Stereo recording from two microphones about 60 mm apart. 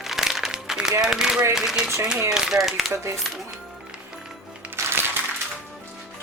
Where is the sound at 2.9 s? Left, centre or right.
Right.